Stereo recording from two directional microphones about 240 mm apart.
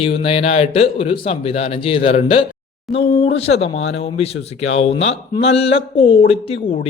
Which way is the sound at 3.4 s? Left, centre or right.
Left.